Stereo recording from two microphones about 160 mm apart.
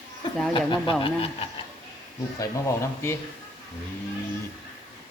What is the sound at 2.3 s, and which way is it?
Speech, 15° left (ahead or behind).